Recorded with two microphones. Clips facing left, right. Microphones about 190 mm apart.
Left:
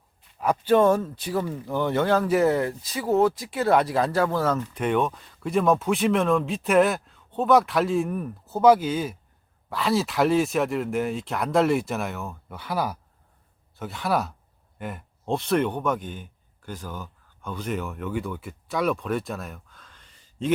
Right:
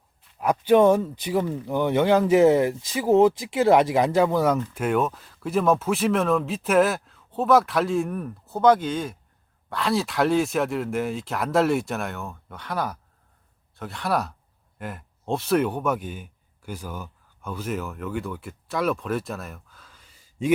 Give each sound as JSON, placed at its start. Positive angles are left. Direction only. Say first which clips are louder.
{"t": 0.3, "sound": "speech", "louder": "right 2 dB", "side_deg": -15}
{"t": 4.8, "sound": "speech", "louder": "even", "side_deg": -5}